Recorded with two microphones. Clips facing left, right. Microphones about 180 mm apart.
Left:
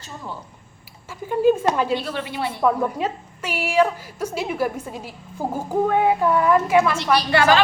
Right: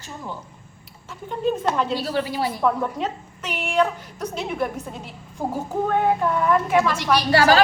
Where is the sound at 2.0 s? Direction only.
35° right (ahead or behind).